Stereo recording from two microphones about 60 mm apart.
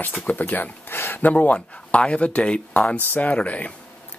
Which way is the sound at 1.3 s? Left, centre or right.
Left.